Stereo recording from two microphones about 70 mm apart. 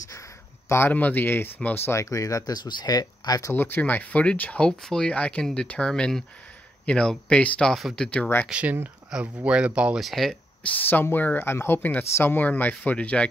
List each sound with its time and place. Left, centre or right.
0.7 s speech: left
1.9 s speech: left
3.5 s speech: left
7.7 s speech: centre
8.0 s speech: centre
8.5 s speech: centre
9.9 s speech: centre
10.6 s speech: left